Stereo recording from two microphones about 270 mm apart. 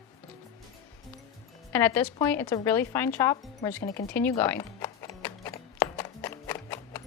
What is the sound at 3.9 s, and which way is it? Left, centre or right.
Music, centre.